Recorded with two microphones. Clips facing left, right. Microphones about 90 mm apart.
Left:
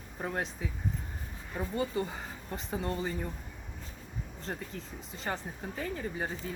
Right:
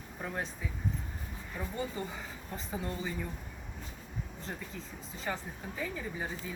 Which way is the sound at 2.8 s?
45° left (ahead or behind).